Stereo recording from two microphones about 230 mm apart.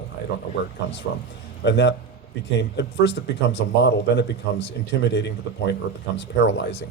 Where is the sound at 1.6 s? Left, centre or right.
Left.